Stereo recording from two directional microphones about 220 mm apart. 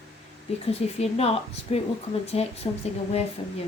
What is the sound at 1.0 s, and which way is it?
Speech, 25° left (ahead or behind).